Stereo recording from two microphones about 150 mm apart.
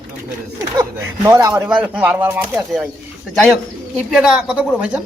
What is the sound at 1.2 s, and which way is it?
Speech, 25° right (ahead or behind).